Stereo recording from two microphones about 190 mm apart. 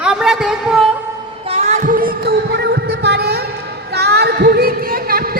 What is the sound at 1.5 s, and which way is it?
Heart sounds, 35° right (ahead or behind).